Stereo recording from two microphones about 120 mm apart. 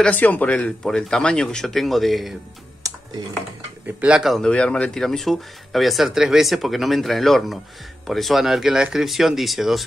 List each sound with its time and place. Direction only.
0.0 s speech: 15° left (ahead or behind)
2.8 s typing: 30° right (ahead or behind)
3.8 s speech: 10° right (ahead or behind)
4.5 s speech: 10° left (ahead or behind)